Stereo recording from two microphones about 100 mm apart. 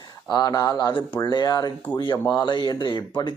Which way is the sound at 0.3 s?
40° left (ahead or behind).